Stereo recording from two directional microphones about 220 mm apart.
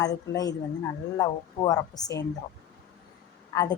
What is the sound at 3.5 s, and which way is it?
Speech, 20° left (ahead or behind).